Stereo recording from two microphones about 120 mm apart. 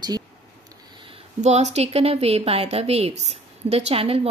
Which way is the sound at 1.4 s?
70° right (ahead or behind).